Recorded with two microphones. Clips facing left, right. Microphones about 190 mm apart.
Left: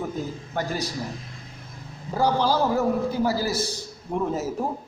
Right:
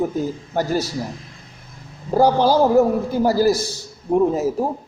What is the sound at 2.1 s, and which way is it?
A man's voice, 40° right (ahead or behind).